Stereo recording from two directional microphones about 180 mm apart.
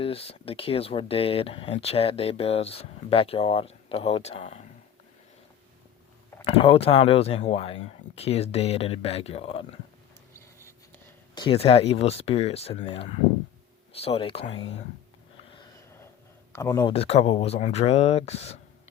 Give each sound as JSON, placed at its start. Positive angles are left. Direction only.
{"t": 0.0, "sound": "speech", "side_deg": 30}
{"t": 6.4, "sound": "speech", "side_deg": 30}
{"t": 10.3, "sound": "a sound", "side_deg": 15}
{"t": 11.4, "sound": "speech", "side_deg": 35}
{"t": 16.5, "sound": "speech", "side_deg": 20}
{"t": 16.9, "sound": "speech", "side_deg": 35}